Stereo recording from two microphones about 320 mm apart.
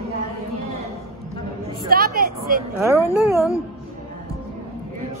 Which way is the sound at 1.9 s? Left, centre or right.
Right.